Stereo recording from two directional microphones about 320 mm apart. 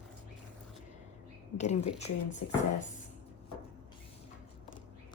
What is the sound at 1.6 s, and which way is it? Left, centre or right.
Speech, left.